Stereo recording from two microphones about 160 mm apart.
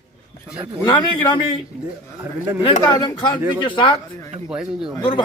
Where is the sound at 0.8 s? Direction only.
30° left (ahead or behind).